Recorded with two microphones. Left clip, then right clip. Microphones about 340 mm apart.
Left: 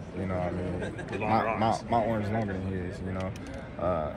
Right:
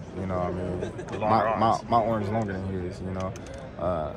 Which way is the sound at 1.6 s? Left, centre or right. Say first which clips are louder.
Right 4 dB; centre.